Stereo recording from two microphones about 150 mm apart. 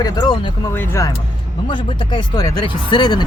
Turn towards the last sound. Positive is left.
turn(degrees=30)  # may be behind; listen again after turning